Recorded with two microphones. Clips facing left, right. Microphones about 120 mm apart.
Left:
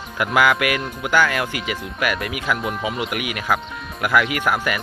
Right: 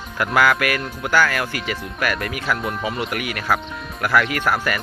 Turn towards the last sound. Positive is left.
turn(degrees=15)  # may be behind; listen again after turning